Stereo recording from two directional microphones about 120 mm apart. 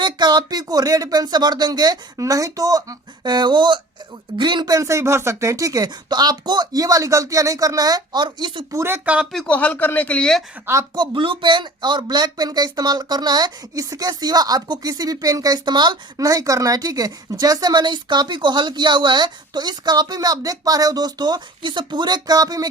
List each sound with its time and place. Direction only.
0.0 s speech: 35° right (ahead or behind)
8.7 s speech: 20° right (ahead or behind)
9.3 s speech: centre (ahead or behind)
9.6 s speech: 15° left (ahead or behind)
10.9 s speech: 40° right (ahead or behind)